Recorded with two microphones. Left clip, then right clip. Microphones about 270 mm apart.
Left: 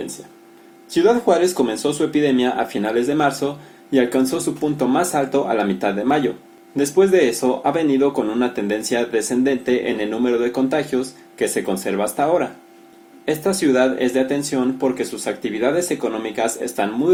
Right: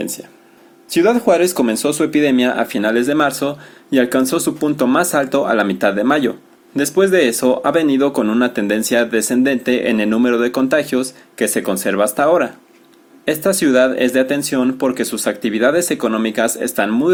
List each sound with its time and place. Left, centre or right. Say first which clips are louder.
0.9 s speech: right 2 dB; right